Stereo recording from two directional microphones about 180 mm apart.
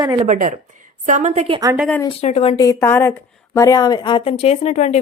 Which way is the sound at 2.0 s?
35° left (ahead or behind).